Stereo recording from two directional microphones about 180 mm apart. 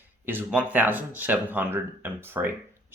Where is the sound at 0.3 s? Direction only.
10° right (ahead or behind).